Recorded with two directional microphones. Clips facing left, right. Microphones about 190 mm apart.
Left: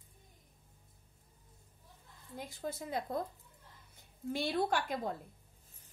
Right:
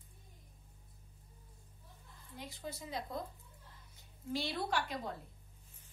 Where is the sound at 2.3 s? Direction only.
50° left (ahead or behind).